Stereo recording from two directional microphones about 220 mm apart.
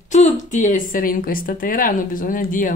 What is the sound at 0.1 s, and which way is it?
Speech, 35° left (ahead or behind).